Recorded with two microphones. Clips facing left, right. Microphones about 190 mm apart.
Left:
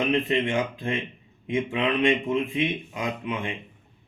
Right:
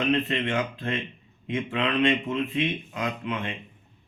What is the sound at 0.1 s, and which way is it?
Speech, 10° left (ahead or behind).